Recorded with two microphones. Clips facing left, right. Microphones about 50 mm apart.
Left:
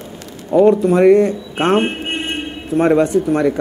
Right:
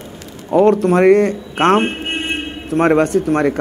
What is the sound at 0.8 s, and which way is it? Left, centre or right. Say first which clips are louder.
Speech: even; right.